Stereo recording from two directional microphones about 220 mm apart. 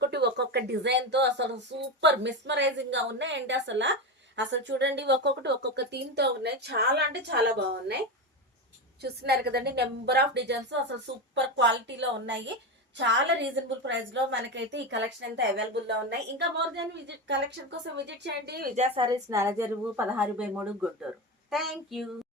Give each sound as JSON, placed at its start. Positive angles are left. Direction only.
{"t": 0.0, "sound": "speech", "side_deg": -50}
{"t": 9.0, "sound": "a woman's voice", "side_deg": -45}
{"t": 18.8, "sound": "a woman's voice", "side_deg": -25}
{"t": 21.5, "sound": "child singing", "side_deg": 0}